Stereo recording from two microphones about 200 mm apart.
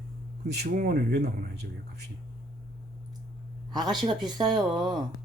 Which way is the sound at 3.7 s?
20° right (ahead or behind).